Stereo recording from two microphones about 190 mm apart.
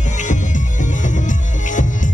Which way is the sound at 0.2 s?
40° left (ahead or behind).